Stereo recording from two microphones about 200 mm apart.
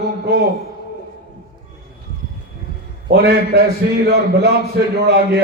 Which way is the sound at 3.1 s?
55° right (ahead or behind).